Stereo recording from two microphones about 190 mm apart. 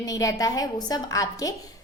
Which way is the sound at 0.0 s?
20° left (ahead or behind).